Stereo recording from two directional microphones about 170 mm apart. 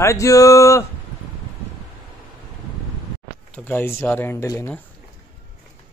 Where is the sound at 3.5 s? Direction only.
10° left (ahead or behind).